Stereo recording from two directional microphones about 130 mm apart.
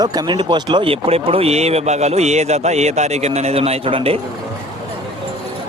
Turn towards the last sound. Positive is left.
turn(degrees=-45)  # may be behind; listen again after turning